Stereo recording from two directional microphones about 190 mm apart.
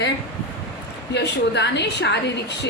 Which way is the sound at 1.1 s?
65° left (ahead or behind).